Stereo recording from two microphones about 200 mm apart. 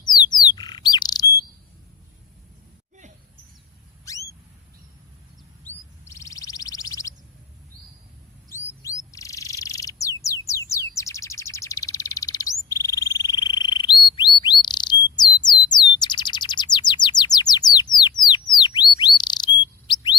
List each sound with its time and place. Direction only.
0.0 s bird: 20° left (ahead or behind)
5.6 s chirp: 15° left (ahead or behind)
8.8 s bird: 15° left (ahead or behind)